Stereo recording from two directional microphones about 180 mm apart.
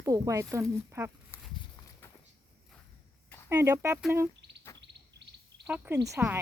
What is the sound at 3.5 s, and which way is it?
Speech, 15° right (ahead or behind).